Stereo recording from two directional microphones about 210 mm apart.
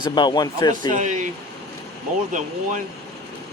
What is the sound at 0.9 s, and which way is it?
Speech, 35° right (ahead or behind).